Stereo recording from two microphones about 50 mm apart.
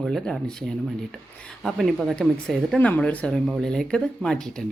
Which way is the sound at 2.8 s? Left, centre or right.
Left.